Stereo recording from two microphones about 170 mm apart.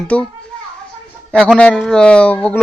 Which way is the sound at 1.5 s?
5° left (ahead or behind).